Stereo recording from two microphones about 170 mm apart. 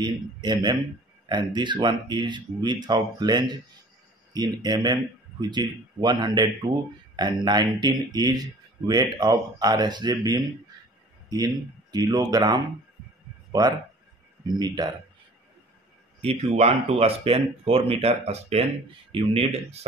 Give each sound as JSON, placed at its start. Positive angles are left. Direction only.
{"t": 0.0, "sound": "speech", "side_deg": -25}
{"t": 16.2, "sound": "speech", "side_deg": -35}